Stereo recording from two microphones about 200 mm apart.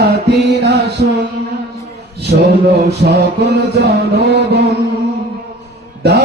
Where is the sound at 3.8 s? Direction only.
55° right (ahead or behind).